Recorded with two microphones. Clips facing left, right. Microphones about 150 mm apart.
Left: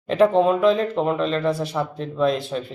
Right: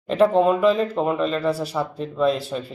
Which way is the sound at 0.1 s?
Centre (ahead or behind).